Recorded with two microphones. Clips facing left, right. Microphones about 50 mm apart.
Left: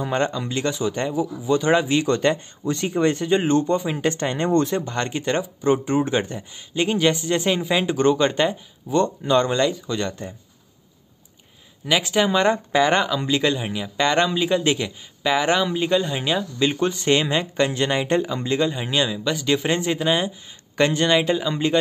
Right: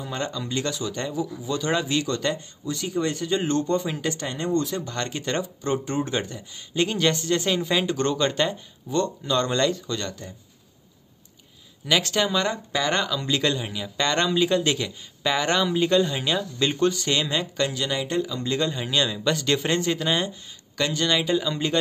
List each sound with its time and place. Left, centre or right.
0.0 s speech: left
0.6 s speech: left
4.0 s speech: left
4.8 s speech: left
9.5 s speech: centre
11.8 s speech: centre
16.9 s speech: left
17.7 s speech: left
18.4 s speech: left
20.7 s speech: left
21.3 s speech: centre